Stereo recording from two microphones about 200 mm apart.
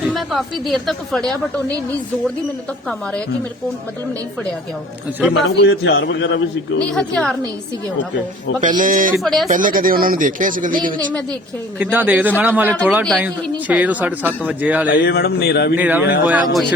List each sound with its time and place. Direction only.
0.1 s speech: centre (ahead or behind)
5.4 s a man's voice: 60° left (ahead or behind)
6.9 s speech: 5° left (ahead or behind)
8.6 s speech: 40° right (ahead or behind)
9.2 s speech: centre (ahead or behind)
9.5 s speech: 40° right (ahead or behind)
11.8 s speech: 10° right (ahead or behind)
12.6 s speech: 10° left (ahead or behind)
13.1 s speech: 5° right (ahead or behind)
14.8 s speech: 55° left (ahead or behind)
15.7 s speech: 10° right (ahead or behind)